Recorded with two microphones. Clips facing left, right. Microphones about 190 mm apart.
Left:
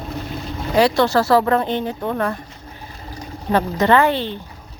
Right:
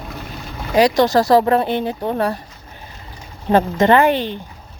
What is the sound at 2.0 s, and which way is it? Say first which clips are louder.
Speech: right 2 dB; 35° right (ahead or behind).